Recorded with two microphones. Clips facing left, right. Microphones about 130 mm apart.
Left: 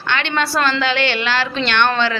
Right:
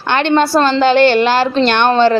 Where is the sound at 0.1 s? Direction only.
40° right (ahead or behind).